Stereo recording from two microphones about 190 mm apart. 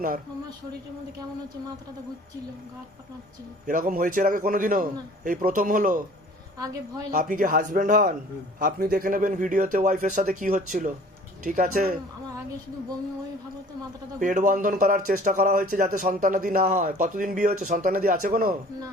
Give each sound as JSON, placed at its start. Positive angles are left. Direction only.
{"t": 3.7, "sound": "speech", "side_deg": -45}
{"t": 7.1, "sound": "speech", "side_deg": -45}
{"t": 14.2, "sound": "speech", "side_deg": -45}